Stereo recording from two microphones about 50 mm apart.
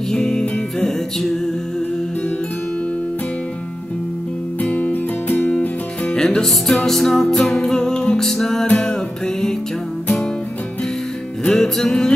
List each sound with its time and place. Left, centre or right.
0.1 s music: centre
4.6 s music: left
6.1 s music: centre
8.6 s music: left
11.4 s music: centre